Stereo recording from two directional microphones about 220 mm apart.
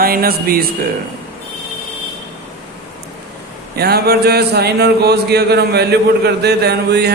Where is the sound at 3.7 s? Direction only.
45° right (ahead or behind).